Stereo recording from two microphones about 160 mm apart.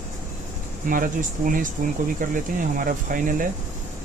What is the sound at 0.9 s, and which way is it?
Speech, 60° right (ahead or behind).